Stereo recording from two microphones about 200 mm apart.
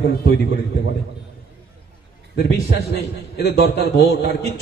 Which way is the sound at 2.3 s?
55° left (ahead or behind).